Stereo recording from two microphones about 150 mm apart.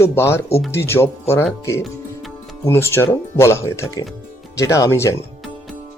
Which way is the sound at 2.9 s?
15° left (ahead or behind).